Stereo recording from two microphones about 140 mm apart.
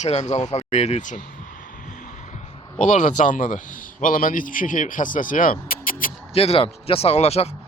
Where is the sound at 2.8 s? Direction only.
65° left (ahead or behind); by 6.1 s 80° left.